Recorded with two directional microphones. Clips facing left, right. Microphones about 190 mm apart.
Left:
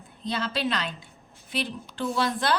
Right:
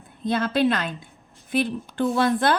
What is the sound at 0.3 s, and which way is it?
A woman's voice, 50° right (ahead or behind).